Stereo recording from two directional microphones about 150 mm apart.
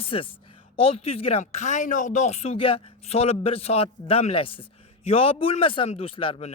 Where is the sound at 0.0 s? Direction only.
40° left (ahead or behind).